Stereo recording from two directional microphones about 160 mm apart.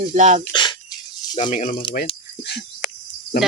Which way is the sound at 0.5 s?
25° left (ahead or behind).